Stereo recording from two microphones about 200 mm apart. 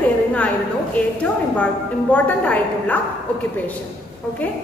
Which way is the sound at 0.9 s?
5° left (ahead or behind).